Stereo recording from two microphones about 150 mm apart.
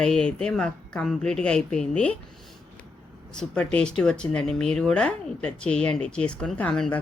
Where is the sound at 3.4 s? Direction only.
5° left (ahead or behind).